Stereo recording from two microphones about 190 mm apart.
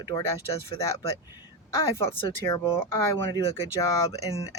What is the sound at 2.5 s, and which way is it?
Speech, 15° left (ahead or behind).